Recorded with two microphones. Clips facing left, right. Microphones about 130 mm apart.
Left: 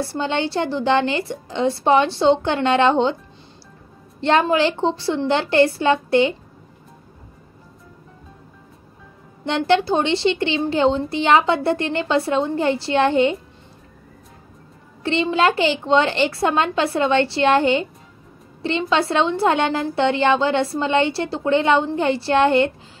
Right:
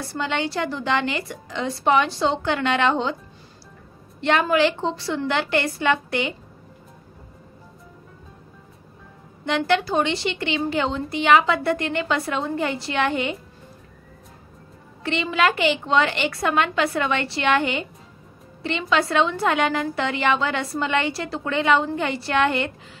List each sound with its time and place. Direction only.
0.0 s a woman's voice: 30° left (ahead or behind)
4.2 s a woman's voice: 30° left (ahead or behind)
9.5 s a woman's voice: 30° left (ahead or behind)
15.0 s a woman's voice: 30° left (ahead or behind)